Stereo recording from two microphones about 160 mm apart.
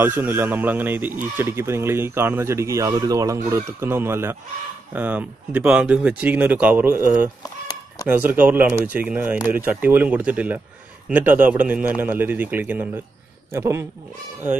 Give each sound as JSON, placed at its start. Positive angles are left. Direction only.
{"t": 0.0, "sound": "speech", "side_deg": -15}